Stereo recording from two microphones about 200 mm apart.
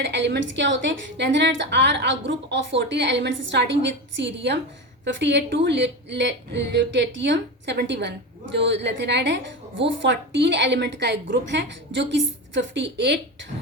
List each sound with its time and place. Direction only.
0.0 s a woman's voice: 60° right (ahead or behind)